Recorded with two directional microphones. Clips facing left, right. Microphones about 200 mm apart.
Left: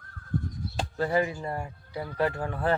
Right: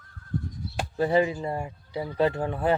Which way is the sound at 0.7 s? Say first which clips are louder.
Right 4 dB; 15° right (ahead or behind).